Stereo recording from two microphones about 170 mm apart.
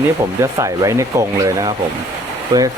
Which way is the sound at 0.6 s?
20° right (ahead or behind).